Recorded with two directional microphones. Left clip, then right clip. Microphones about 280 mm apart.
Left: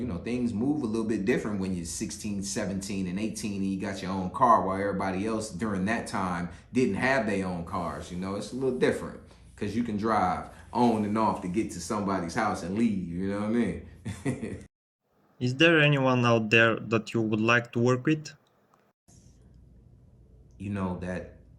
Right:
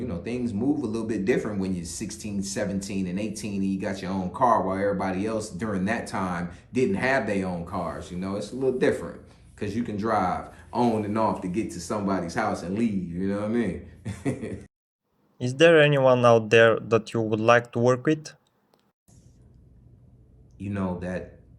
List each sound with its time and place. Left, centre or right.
0.0 s speech: centre
15.4 s speech: right
20.6 s speech: centre